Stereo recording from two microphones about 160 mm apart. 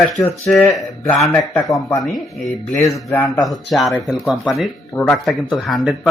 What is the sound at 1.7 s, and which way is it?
A man's voice, centre (ahead or behind).